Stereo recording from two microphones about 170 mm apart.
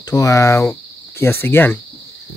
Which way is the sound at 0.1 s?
20° left (ahead or behind).